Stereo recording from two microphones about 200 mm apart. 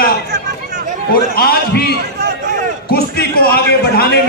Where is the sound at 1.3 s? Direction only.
50° left (ahead or behind).